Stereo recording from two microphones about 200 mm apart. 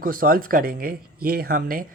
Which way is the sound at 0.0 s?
45° right (ahead or behind).